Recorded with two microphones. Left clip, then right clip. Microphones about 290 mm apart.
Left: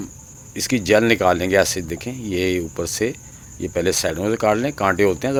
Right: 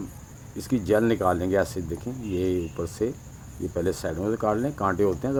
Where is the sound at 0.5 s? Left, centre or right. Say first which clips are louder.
Left 7 dB; left.